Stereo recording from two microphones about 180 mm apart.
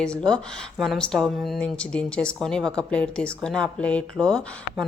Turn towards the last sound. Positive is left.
turn(degrees=0)  # may be behind; listen again after turning